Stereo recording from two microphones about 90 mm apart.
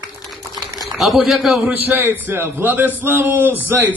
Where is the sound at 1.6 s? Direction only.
20° right (ahead or behind).